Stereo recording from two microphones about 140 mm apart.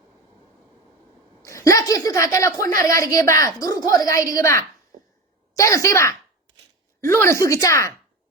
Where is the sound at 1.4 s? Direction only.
20° left (ahead or behind).